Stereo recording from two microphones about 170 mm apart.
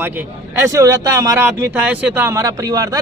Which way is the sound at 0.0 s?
10° right (ahead or behind).